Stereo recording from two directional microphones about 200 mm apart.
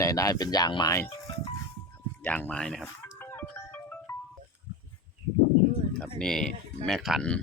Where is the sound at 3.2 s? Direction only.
10° left (ahead or behind).